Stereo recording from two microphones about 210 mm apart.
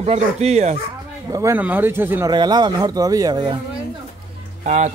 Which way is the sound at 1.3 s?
15° right (ahead or behind).